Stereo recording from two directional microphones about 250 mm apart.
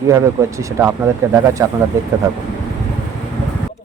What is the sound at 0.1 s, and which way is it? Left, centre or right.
Speech, centre.